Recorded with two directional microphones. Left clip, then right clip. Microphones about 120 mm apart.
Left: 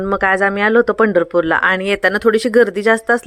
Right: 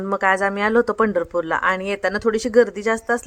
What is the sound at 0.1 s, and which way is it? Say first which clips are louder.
Speech: left 4 dB; 25° left (ahead or behind).